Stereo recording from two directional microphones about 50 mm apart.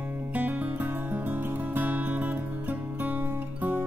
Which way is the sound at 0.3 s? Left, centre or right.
Right.